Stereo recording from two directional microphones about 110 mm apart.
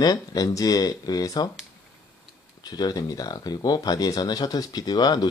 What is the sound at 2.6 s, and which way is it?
Speech, 35° left (ahead or behind).